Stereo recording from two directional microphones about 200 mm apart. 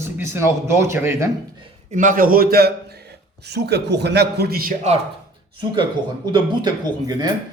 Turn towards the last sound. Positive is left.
turn(degrees=-20)  # may be behind; listen again after turning